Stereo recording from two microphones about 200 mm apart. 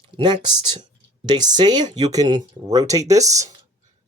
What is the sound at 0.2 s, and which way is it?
Speech, 20° right (ahead or behind).